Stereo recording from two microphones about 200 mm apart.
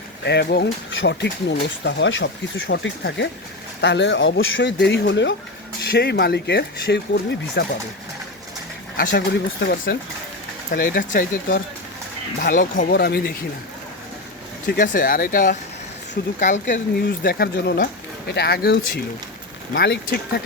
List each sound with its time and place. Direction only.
0.3 s speech: 55° left (ahead or behind)
9.0 s speech: 55° left (ahead or behind)
10.7 s speech: 45° left (ahead or behind)
14.7 s speech: 45° left (ahead or behind)
17.2 s speech: 50° left (ahead or behind)